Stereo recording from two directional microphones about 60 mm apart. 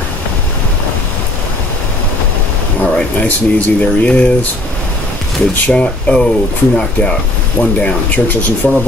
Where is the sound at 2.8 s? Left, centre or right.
Left.